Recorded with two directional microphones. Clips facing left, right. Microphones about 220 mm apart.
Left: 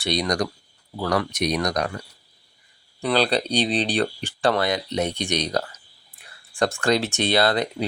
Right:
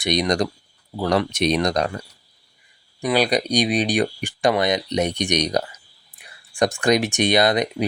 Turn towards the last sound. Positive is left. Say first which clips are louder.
# right 3 dB
turn(degrees=-15)  # may be behind; listen again after turning